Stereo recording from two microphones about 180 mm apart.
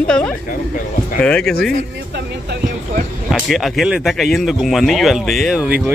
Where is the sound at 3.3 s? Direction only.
Centre (ahead or behind).